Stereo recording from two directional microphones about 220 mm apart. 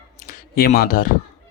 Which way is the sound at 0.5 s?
40° left (ahead or behind).